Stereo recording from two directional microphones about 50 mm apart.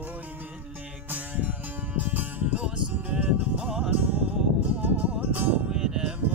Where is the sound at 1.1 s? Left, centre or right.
Right.